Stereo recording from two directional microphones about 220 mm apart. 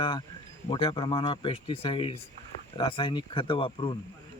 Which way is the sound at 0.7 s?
25° left (ahead or behind).